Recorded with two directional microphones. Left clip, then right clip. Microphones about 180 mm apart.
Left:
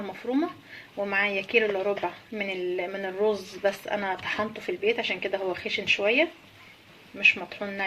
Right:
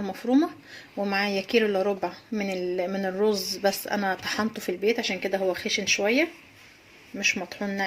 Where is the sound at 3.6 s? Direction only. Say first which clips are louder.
Right 1 dB; 65° right (ahead or behind).